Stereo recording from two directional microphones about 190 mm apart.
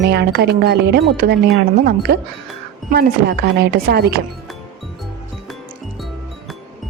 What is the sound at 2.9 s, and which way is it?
Speech, 55° right (ahead or behind).